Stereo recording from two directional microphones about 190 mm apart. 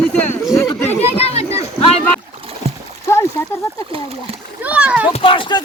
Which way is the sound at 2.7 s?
30° right (ahead or behind).